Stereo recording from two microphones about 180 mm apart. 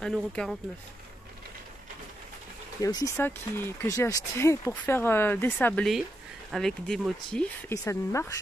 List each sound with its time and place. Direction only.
0.0 s speech: centre (ahead or behind)
2.8 s speech: 20° left (ahead or behind); by 7.4 s 5° left (ahead or behind)
7.7 s speech: 15° left (ahead or behind)